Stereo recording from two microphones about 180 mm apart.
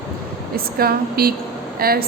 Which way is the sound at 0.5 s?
55° right (ahead or behind).